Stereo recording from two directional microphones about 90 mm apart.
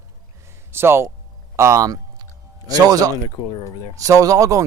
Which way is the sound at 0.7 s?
25° right (ahead or behind).